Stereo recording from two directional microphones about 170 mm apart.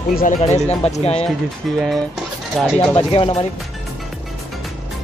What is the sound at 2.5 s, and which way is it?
Speech, centre (ahead or behind).